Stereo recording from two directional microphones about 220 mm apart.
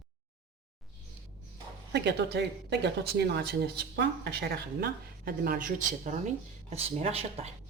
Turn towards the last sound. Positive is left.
turn(degrees=-25)  # may be behind; listen again after turning